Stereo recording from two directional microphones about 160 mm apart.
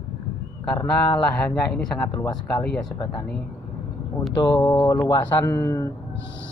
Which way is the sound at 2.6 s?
5° left (ahead or behind).